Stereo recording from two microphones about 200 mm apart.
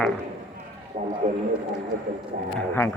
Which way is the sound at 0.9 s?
35° right (ahead or behind).